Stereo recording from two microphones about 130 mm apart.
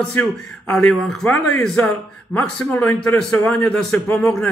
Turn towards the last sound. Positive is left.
turn(degrees=5)  # may be behind; listen again after turning